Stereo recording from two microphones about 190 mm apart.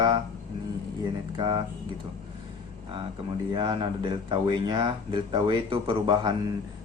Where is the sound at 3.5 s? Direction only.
25° right (ahead or behind).